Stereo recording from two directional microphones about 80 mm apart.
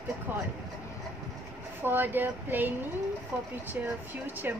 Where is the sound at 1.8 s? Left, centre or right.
Right.